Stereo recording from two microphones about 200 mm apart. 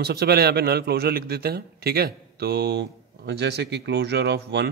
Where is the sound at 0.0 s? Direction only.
55° right (ahead or behind).